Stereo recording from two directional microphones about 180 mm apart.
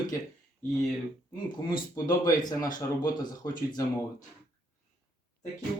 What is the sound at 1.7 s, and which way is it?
Speech, 20° left (ahead or behind).